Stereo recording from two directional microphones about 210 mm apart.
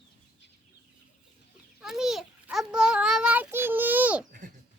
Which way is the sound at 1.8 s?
Centre (ahead or behind).